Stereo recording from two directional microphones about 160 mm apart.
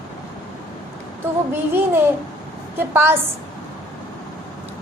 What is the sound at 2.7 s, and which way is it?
Speech, 15° right (ahead or behind).